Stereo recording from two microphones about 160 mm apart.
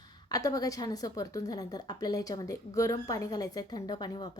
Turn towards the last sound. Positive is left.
turn(degrees=25)  # may be behind; listen again after turning